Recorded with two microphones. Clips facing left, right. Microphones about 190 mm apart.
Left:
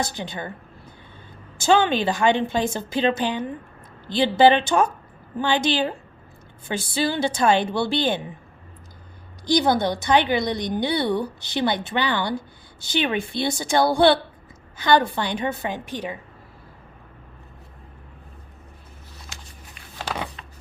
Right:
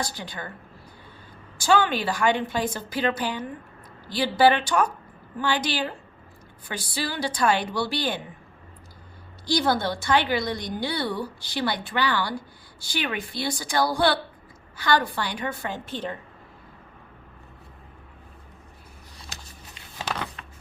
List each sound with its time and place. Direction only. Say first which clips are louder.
0.0 s a woman's voice: left 4 dB; 20° left (ahead or behind)
1.5 s a woman's voice: left 3 dB; 25° left (ahead or behind)
9.5 s a woman's voice: left 4 dB; 20° left (ahead or behind)
19.3 s a sound: right 2 dB; 40° right (ahead or behind)